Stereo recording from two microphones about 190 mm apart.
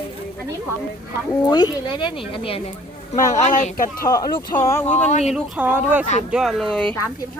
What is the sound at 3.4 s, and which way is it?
Speech, 40° left (ahead or behind).